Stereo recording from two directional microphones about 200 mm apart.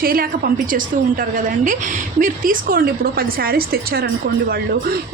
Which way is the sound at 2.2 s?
45° right (ahead or behind).